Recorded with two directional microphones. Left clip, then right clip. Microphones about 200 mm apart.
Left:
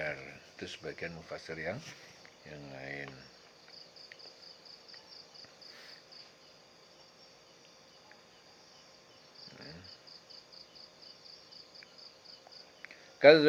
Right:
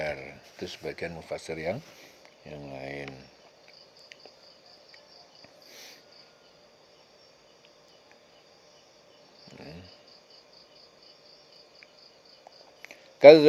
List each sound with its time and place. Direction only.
0.0 s a sound: 40° right (ahead or behind)
1.5 s speech: 40° right (ahead or behind)
12.8 s cricket: 40° right (ahead or behind)